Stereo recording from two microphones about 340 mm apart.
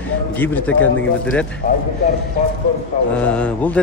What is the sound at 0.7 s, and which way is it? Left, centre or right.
Speech, left.